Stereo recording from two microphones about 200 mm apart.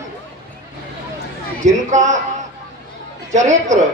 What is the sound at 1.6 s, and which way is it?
Speech, 35° right (ahead or behind).